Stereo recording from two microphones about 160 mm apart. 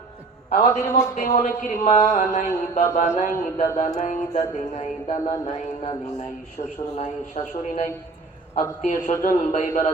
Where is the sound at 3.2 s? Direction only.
55° left (ahead or behind).